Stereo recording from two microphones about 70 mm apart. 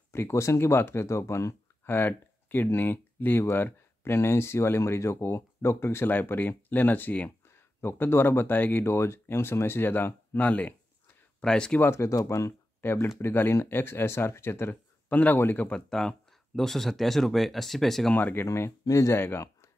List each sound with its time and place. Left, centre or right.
0.1 s speech: left
1.9 s speech: left; by 11.8 s centre
11.8 s speech: left
12.8 s speech: left
15.0 s a man's voice: left
15.7 s speech: centre
18.1 s speech: left
18.9 s speech: left
19.1 s speech: left